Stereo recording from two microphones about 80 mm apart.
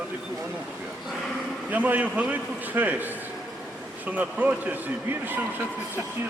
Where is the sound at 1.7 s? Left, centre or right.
Centre.